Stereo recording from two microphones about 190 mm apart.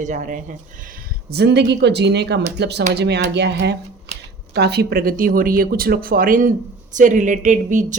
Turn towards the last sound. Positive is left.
turn(degrees=-40)  # may be behind; listen again after turning